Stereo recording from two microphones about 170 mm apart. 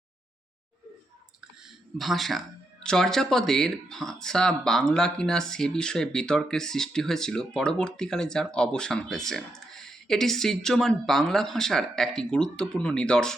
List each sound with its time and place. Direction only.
2.0 s speech: centre (ahead or behind)